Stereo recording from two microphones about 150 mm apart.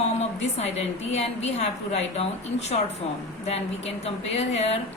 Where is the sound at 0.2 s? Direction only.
45° left (ahead or behind).